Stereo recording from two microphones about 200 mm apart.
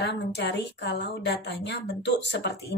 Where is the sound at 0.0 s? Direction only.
60° left (ahead or behind).